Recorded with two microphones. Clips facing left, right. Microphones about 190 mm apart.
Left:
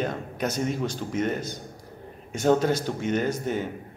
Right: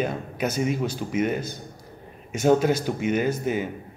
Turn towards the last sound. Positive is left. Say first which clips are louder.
# right 2 dB
turn(degrees=-10)  # may be behind; listen again after turning